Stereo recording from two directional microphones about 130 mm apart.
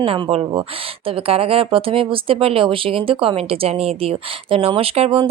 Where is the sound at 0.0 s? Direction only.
45° right (ahead or behind).